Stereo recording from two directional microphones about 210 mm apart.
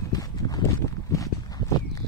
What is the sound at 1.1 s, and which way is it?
Walk, 15° left (ahead or behind).